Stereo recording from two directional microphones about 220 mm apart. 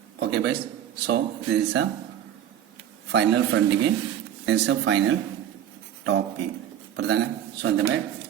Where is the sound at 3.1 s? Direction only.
55° right (ahead or behind).